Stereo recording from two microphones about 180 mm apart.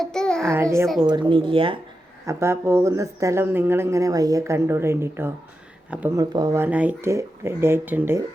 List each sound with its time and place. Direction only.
0.0 s babbling: 5° left (ahead or behind)
0.5 s speech: 15° right (ahead or behind)
1.3 s speech: 30° right (ahead or behind)
2.2 s speech: 15° right (ahead or behind)
6.1 s speech: 20° right (ahead or behind)